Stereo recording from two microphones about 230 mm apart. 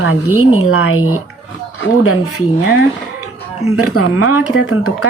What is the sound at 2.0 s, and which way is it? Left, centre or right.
Speech, left.